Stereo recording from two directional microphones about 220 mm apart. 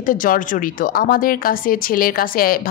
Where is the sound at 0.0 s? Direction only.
40° left (ahead or behind).